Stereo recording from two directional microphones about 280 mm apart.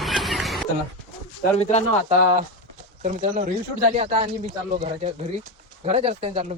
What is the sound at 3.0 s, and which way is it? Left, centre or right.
Speech, right.